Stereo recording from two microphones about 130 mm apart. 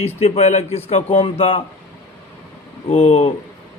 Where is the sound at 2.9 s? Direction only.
50° left (ahead or behind).